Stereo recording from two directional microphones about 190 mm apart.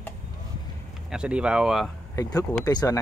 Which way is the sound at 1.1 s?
5° right (ahead or behind).